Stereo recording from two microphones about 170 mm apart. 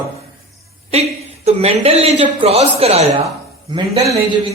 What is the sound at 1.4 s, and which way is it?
A man's voice, 35° right (ahead or behind).